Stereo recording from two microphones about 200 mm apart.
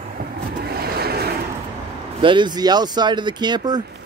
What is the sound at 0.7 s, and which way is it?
Vehicle, 50° right (ahead or behind).